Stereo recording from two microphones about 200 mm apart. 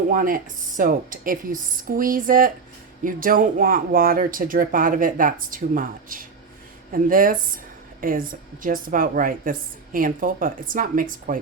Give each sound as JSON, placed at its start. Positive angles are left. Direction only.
{"t": 0.1, "sound": "a woman's voice", "side_deg": -45}